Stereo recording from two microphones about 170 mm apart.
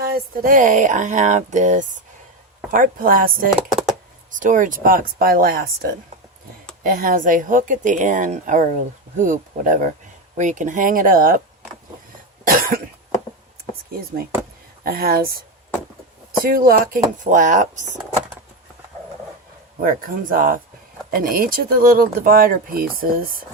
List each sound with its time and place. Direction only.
0.0 s speech: 60° right (ahead or behind)
12.5 s cough: 55° right (ahead or behind)
14.8 s speech: 65° right (ahead or behind)
16.4 s speech: 60° right (ahead or behind)
19.8 s speech: 55° right (ahead or behind)